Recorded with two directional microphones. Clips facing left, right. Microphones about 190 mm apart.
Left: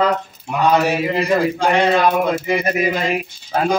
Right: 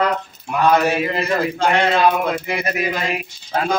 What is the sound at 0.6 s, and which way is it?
Speech, 15° left (ahead or behind).